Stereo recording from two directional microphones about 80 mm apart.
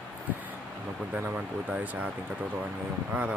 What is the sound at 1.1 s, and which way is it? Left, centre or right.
Speech, centre.